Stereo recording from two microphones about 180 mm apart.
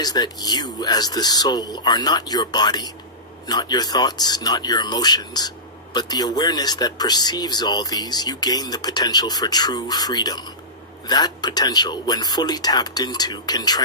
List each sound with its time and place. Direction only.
0.0 s speech: 20° left (ahead or behind)